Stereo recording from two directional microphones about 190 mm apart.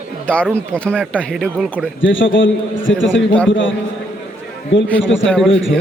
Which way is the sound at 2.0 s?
85° left.